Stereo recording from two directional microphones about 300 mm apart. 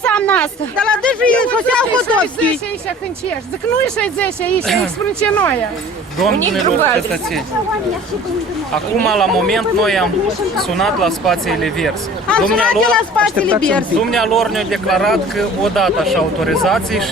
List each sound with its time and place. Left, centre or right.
0.0 s speech: centre
3.8 s speech: centre
8.7 s speech: centre